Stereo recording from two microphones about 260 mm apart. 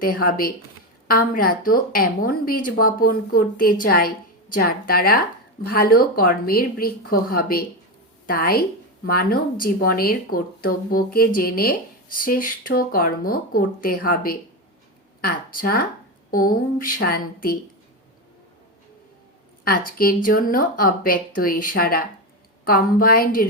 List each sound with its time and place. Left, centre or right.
0.0 s speech: left
19.6 s speech: left